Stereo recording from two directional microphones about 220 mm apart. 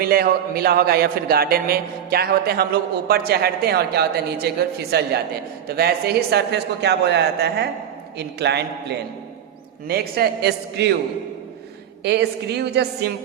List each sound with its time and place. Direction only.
0.0 s speech: 45° right (ahead or behind)
12.0 s speech: 50° right (ahead or behind)